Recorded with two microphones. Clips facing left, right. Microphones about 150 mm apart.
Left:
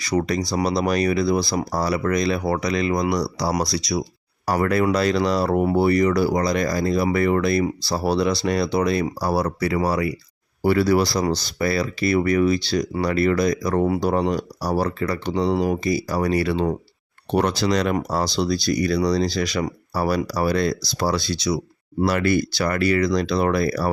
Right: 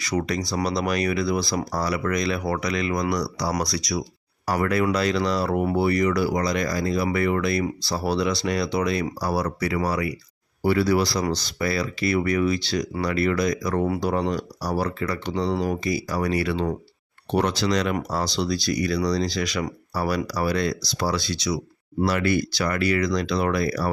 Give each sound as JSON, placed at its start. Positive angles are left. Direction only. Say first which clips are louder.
{"t": 0.0, "sound": "speech", "louder": "left 3 dB", "side_deg": 35}
{"t": 4.4, "sound": "speech", "louder": "left 3 dB", "side_deg": 35}
{"t": 10.6, "sound": "speech", "louder": "left 3 dB", "side_deg": 45}
{"t": 15.5, "sound": "speech", "louder": "left 4 dB", "side_deg": 10}
{"t": 15.8, "sound": "speech", "louder": "left 3 dB", "side_deg": 30}
{"t": 17.9, "sound": "speech", "louder": "left 3 dB", "side_deg": 35}
{"t": 22.0, "sound": "speech", "louder": "left 2 dB", "side_deg": 50}
{"t": 22.3, "sound": "speech", "louder": "left 3 dB", "side_deg": 35}